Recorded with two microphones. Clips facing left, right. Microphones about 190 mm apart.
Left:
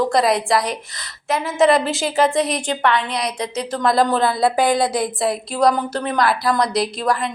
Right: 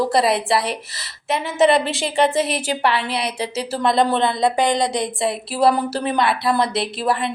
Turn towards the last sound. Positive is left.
turn(degrees=-5)  # may be behind; listen again after turning